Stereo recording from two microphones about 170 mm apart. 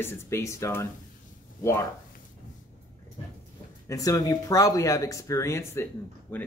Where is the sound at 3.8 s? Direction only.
20° left (ahead or behind).